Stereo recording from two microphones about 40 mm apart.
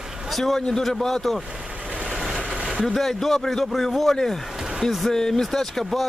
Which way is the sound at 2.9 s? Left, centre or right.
Centre.